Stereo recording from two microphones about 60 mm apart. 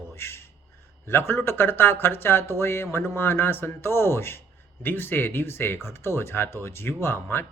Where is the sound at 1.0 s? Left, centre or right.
Left.